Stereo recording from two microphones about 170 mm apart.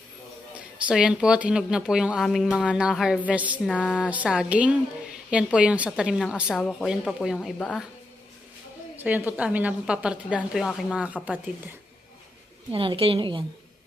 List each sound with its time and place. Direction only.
0.9 s a woman's voice: 5° right (ahead or behind)
3.7 s a woman's voice: 10° left (ahead or behind)
4.1 s a woman's voice: 5° right (ahead or behind)
6.5 s a woman's voice: 5° left (ahead or behind)
9.0 s a woman's voice: 10° right (ahead or behind)
12.7 s a woman's voice: 30° right (ahead or behind)